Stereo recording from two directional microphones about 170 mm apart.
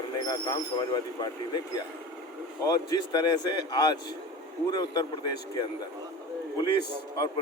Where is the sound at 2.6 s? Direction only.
25° left (ahead or behind).